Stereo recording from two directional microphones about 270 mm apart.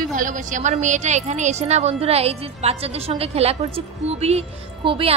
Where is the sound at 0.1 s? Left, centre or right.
Right.